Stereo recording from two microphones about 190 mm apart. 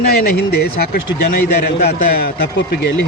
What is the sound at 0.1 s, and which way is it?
Speech, 55° left (ahead or behind).